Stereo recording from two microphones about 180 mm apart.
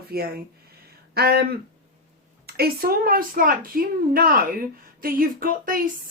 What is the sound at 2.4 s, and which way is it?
A woman's voice, 60° right (ahead or behind).